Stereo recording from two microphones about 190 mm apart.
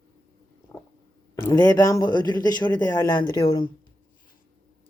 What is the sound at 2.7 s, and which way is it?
Speech, 10° left (ahead or behind).